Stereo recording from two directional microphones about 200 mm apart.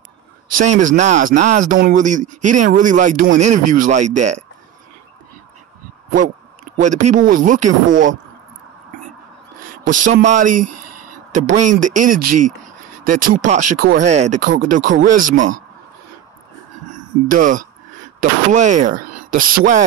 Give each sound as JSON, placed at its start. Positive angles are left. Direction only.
{"t": 0.6, "sound": "speech", "side_deg": -40}
{"t": 6.8, "sound": "speech", "side_deg": -35}
{"t": 9.8, "sound": "speech", "side_deg": -40}
{"t": 14.0, "sound": "speech", "side_deg": -35}
{"t": 17.3, "sound": "speech", "side_deg": -40}